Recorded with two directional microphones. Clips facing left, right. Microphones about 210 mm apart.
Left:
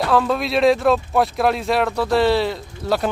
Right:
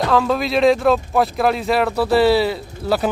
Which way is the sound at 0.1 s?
Centre (ahead or behind).